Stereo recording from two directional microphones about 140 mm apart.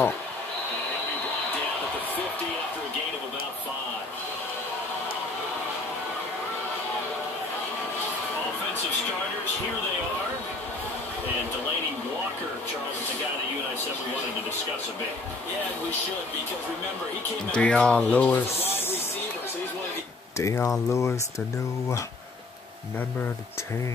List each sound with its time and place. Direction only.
17.6 s speech: 5° left (ahead or behind)
20.3 s speech: 20° left (ahead or behind)